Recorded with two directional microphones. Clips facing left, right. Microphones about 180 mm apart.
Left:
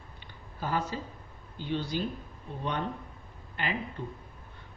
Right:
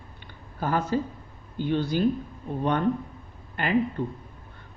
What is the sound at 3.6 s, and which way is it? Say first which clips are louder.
Speech: right 10 dB; 55° right (ahead or behind).